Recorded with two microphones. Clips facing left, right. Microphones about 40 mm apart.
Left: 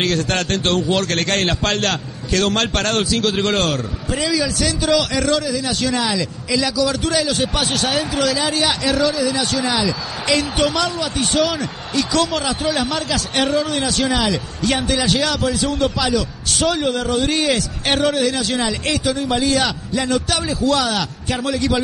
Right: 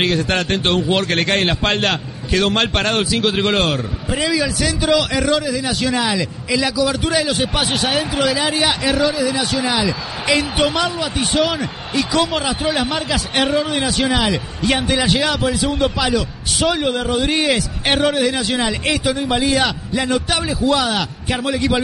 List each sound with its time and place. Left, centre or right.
0.0 s a man's voice: centre